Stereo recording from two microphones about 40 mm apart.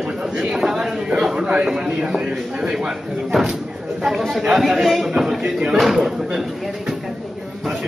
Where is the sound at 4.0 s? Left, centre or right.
Centre.